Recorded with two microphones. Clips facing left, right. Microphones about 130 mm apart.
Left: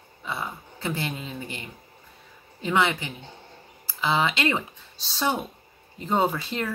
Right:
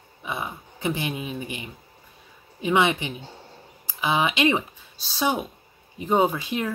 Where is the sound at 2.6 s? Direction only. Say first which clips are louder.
Right 3 dB; 20° right (ahead or behind).